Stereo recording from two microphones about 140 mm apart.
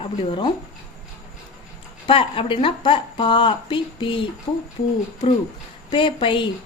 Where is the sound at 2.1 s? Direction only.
40° left (ahead or behind).